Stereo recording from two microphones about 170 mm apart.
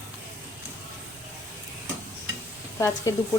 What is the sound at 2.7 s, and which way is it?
Sizzle, 20° left (ahead or behind).